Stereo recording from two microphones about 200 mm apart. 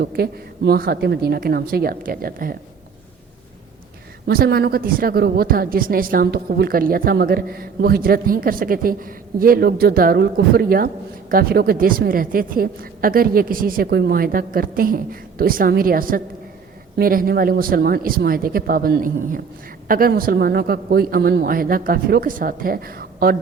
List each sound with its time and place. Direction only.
0.0 s speech: 50° right (ahead or behind)
4.3 s speech: 50° right (ahead or behind)